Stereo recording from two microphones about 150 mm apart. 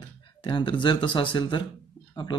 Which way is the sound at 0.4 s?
30° left (ahead or behind).